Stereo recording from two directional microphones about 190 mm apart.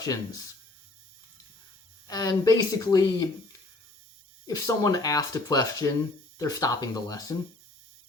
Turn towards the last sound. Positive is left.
turn(degrees=20)  # may be behind; listen again after turning